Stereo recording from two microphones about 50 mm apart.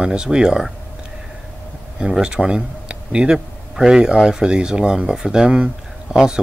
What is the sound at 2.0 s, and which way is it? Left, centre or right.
A man's voice, centre.